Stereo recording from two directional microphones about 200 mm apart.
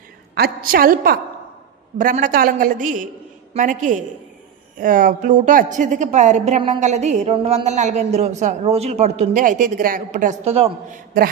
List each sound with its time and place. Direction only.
0.3 s a woman's voice: 50° right (ahead or behind); by 10.7 s 30° right (ahead or behind)